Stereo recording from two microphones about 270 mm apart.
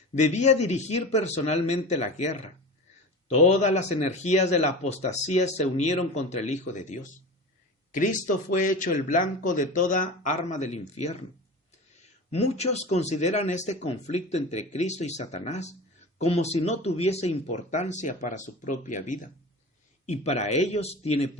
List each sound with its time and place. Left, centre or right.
0.2 s speech: left
12.3 s speech: left